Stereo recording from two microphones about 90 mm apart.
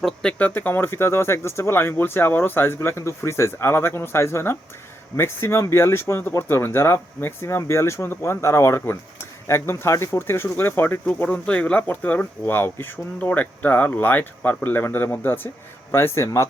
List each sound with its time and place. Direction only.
0.0 s speech: 10° left (ahead or behind); by 16.5 s 30° left (ahead or behind)